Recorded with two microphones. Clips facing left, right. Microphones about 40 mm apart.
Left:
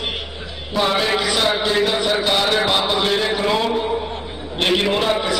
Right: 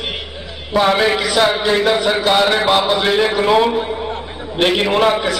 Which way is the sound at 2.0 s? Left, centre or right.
Right.